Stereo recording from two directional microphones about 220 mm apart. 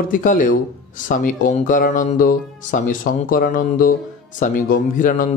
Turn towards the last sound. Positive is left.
turn(degrees=35)  # may be behind; listen again after turning